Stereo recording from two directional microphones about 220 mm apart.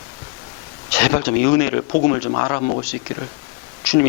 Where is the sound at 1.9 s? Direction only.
30° left (ahead or behind).